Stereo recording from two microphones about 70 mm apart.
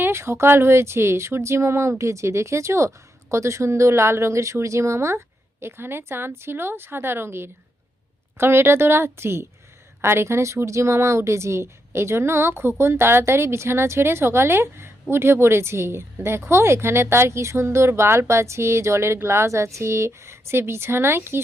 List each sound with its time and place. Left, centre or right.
0.0 s speech: right